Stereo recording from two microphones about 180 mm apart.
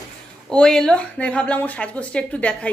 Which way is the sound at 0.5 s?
5° left (ahead or behind).